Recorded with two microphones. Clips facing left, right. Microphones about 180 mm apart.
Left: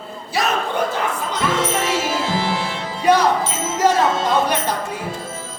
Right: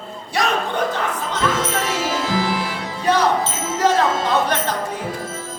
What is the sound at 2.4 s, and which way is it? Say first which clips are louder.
Music: right 1 dB; 25° left (ahead or behind).